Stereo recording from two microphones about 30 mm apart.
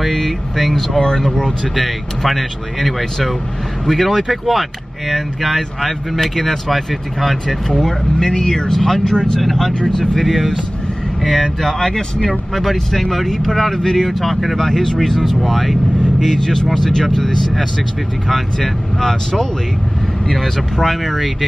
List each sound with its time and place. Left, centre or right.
0.0 s speech: centre
1.8 s speech: centre
9.1 s speech: left
10.2 s speech: centre
11.4 s speech: centre
12.3 s speech: centre
14.2 s speech: centre
14.6 s speech: centre
15.0 s speech: centre